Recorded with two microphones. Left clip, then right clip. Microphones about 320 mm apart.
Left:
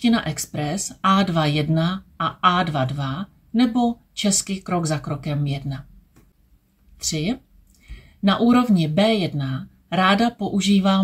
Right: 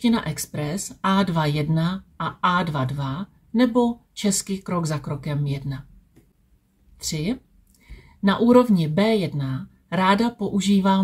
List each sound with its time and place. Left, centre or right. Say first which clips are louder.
0.0 s speech: left 2 dB; centre
7.0 s speech: left 3 dB; centre